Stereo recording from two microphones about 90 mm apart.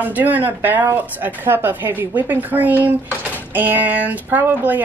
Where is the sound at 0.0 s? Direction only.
20° right (ahead or behind).